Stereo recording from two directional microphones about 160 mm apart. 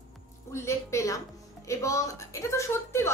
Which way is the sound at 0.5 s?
15° left (ahead or behind).